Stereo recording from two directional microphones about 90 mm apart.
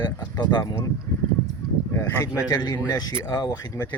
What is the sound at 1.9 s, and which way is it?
Speech, 25° left (ahead or behind).